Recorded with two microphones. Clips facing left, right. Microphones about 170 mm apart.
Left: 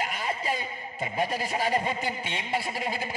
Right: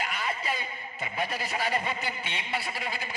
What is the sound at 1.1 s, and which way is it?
A man's voice, 40° left (ahead or behind).